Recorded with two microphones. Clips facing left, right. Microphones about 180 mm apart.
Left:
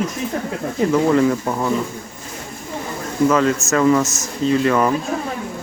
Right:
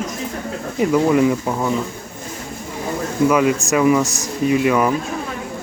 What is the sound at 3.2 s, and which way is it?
Speech, 10° right (ahead or behind).